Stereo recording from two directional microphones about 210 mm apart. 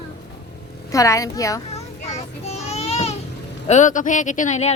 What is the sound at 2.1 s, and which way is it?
Child singing, 30° left (ahead or behind).